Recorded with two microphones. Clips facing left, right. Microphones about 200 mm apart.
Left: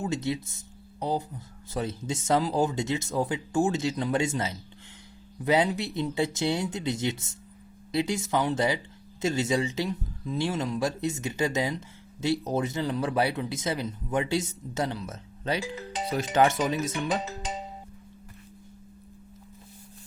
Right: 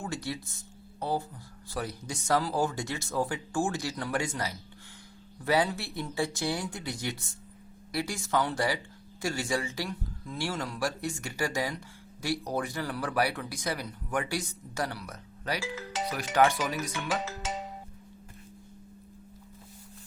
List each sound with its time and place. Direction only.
0.0 s speech: 20° left (ahead or behind)